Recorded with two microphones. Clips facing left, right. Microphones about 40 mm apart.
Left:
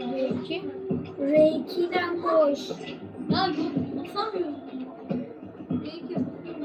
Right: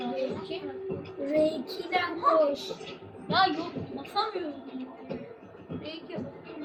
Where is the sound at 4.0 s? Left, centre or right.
Right.